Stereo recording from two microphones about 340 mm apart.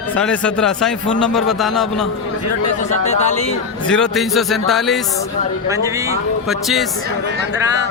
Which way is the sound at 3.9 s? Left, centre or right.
Centre.